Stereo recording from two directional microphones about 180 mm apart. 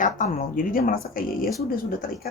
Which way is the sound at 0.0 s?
45° left (ahead or behind).